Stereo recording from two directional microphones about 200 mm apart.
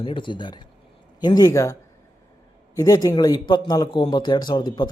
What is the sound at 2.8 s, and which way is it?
Speech, 15° left (ahead or behind).